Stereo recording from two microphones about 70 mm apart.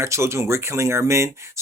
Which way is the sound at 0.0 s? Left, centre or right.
Right.